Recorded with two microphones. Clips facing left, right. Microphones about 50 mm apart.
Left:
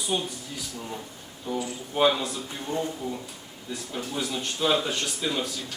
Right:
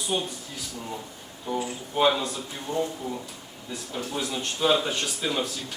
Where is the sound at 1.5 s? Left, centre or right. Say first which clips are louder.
Right 1 dB; centre.